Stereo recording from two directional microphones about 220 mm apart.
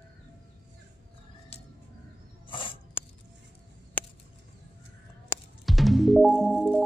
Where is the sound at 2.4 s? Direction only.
20° left (ahead or behind).